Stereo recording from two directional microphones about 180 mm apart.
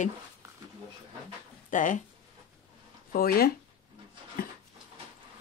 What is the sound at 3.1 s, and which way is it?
Speech, 55° left (ahead or behind).